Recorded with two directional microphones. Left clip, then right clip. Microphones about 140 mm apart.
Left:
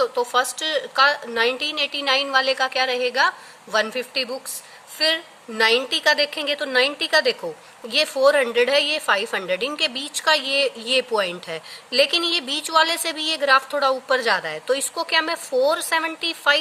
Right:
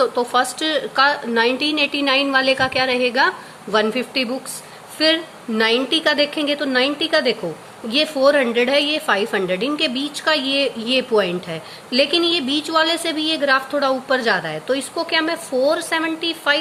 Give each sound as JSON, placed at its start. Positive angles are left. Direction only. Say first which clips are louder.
{"t": 0.0, "sound": "a woman's voice", "louder": "right 3 dB", "side_deg": 35}